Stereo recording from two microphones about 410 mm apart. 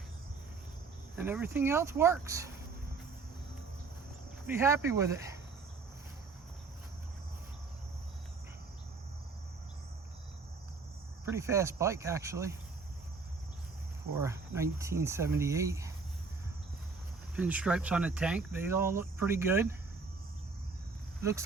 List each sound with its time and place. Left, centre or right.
1.1 s speech: centre
4.4 s speech: centre
11.3 s speech: centre
14.2 s speech: centre
17.3 s speech: centre